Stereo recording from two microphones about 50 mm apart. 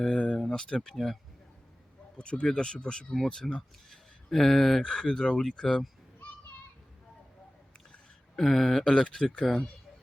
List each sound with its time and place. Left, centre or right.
0.0 s a sound: centre
0.9 s speech: centre
2.1 s speech: centre
8.4 s speech: centre